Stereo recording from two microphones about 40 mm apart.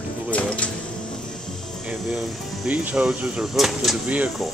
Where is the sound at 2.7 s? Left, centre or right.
Right.